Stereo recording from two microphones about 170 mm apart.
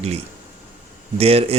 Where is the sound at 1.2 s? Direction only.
35° right (ahead or behind).